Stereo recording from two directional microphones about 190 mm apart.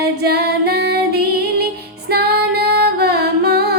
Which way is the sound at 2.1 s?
55° right (ahead or behind).